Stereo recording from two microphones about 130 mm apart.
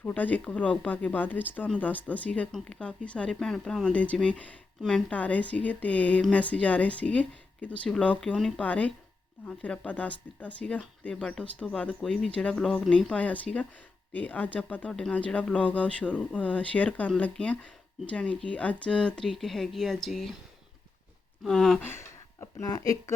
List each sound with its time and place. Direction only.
0.0 s speech: 10° left (ahead or behind)
21.4 s speech: 5° left (ahead or behind)
21.8 s a sound: 20° left (ahead or behind)
22.6 s speech: 25° left (ahead or behind)